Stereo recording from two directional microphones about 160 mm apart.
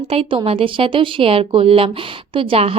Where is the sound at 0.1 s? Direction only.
35° right (ahead or behind).